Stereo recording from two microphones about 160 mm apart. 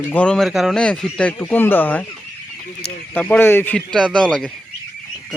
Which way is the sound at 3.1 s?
10° left (ahead or behind).